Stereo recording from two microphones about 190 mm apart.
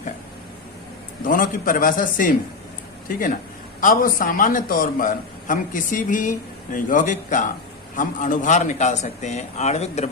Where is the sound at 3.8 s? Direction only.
45° left (ahead or behind).